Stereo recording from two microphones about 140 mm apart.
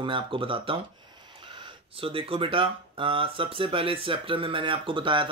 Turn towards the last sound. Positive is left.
turn(degrees=-35)  # may be behind; listen again after turning